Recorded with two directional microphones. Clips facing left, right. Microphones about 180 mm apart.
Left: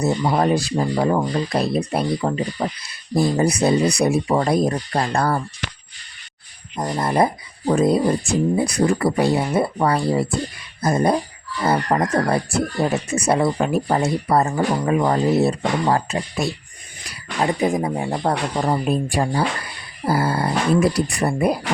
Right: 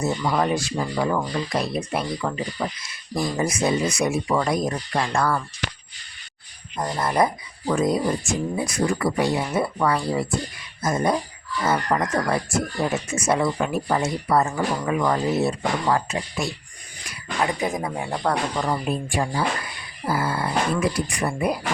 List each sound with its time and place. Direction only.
0.2 s speech: 35° left (ahead or behind)
6.7 s speech: 20° left (ahead or behind); by 21.6 s 35° left (ahead or behind)